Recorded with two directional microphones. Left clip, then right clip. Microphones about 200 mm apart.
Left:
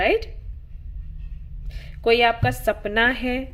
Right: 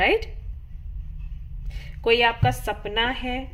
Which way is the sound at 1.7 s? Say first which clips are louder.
Left 2 dB; centre (ahead or behind).